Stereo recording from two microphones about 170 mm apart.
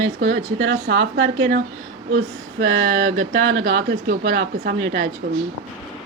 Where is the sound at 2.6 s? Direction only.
70° right (ahead or behind).